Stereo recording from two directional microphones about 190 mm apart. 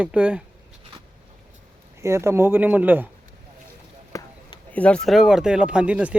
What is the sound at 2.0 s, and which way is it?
Speech, 15° right (ahead or behind).